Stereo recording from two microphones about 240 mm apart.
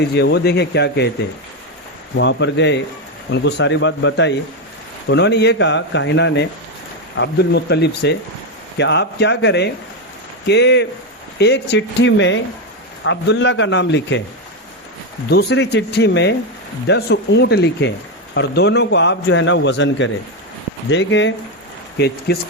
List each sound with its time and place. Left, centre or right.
0.0 s a man's voice: left
2.1 s a man's voice: left
15.3 s a man's voice: left